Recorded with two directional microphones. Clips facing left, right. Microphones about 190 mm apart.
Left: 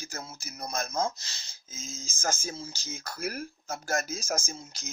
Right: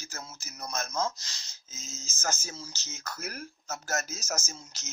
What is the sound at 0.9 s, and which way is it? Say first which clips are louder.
Speech: left 1 dB; 30° left (ahead or behind).